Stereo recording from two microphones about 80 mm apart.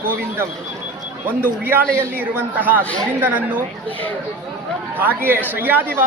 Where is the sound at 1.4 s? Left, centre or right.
Right.